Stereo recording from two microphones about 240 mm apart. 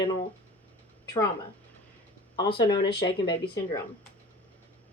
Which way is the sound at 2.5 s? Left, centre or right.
Centre.